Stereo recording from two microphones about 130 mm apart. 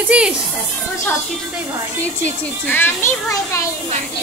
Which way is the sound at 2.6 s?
15° left (ahead or behind).